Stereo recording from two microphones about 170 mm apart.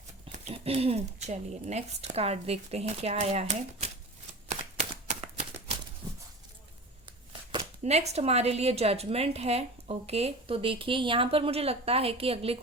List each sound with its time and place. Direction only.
0.3 s a woman's voice: 35° right (ahead or behind)
4.4 s shuffling cards: 45° right (ahead or behind)
7.9 s a woman's voice: 40° right (ahead or behind)